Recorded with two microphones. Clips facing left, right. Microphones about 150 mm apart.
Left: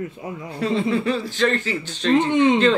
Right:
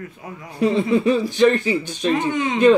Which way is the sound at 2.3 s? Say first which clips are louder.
Left 6 dB; 25° left (ahead or behind).